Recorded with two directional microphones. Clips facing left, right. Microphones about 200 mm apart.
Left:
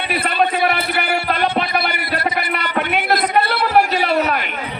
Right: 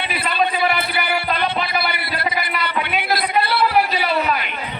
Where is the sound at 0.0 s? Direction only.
50° left (ahead or behind).